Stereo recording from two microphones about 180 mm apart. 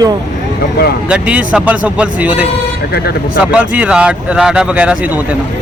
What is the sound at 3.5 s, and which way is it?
Speech, 5° right (ahead or behind).